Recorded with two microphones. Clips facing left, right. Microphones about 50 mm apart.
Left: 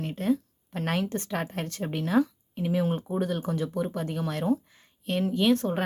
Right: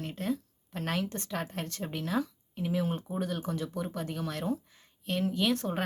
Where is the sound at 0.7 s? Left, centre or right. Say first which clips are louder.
Left 4 dB; left.